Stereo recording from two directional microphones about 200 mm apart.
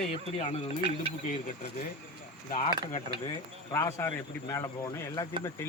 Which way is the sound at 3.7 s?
15° left (ahead or behind).